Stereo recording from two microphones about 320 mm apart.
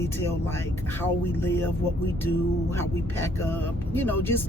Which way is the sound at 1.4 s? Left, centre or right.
Centre.